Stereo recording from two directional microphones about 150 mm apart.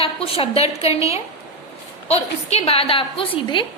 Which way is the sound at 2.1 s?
45° left (ahead or behind).